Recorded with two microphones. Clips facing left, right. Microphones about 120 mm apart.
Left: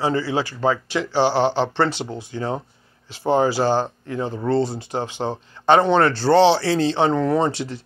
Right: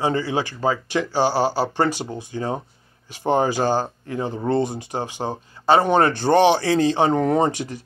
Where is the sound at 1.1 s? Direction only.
45° right (ahead or behind).